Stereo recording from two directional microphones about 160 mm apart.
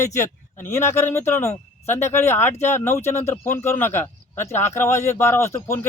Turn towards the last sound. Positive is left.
turn(degrees=15)  # may be behind; listen again after turning